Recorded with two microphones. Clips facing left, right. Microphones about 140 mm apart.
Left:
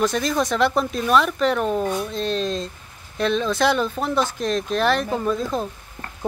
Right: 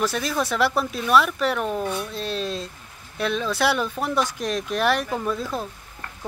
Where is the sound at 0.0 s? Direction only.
5° right (ahead or behind).